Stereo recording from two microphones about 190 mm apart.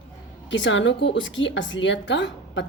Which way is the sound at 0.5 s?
75° left (ahead or behind).